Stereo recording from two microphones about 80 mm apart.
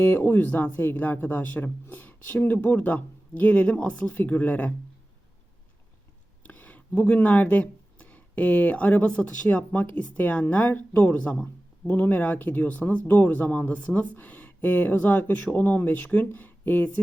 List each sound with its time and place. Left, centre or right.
0.0 s speech: left
6.4 s speech: left